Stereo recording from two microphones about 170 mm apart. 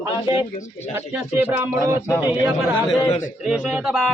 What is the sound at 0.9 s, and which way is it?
Speech, 10° right (ahead or behind).